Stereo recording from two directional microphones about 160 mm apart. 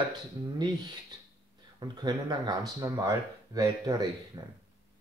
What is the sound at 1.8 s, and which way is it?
Speech, 25° right (ahead or behind).